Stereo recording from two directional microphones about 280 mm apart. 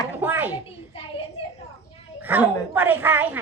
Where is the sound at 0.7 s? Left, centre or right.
Centre.